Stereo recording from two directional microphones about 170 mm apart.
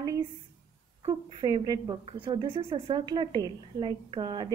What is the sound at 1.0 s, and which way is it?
A woman's voice, 25° right (ahead or behind).